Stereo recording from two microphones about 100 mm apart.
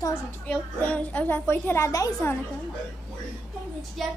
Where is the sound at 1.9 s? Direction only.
35° left (ahead or behind).